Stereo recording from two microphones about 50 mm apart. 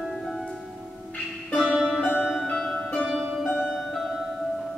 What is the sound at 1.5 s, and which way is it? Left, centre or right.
Music, centre.